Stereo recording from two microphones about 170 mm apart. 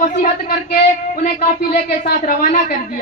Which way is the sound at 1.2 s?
60° left (ahead or behind).